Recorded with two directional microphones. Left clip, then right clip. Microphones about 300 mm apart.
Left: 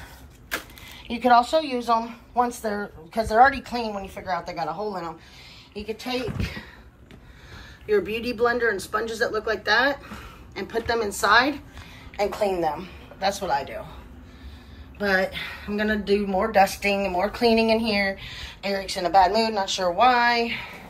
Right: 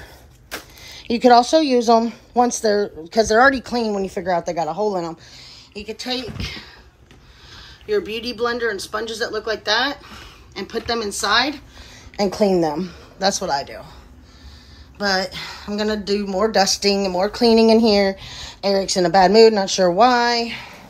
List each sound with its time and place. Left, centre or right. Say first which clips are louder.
1.0 s a woman's voice: right 5 dB; right
3.5 s speech: right 7 dB; centre
12.2 s a woman's voice: right 6 dB; right
13.5 s speech: right 3 dB; centre
15.0 s speech: right 2 dB; centre; by 19.5 s right
20.0 s speech: right 1 dB; centre